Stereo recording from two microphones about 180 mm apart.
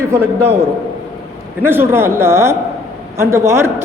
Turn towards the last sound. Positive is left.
turn(degrees=-15)  # may be behind; listen again after turning